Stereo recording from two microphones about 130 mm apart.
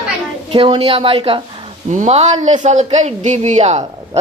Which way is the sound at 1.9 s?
60° right (ahead or behind).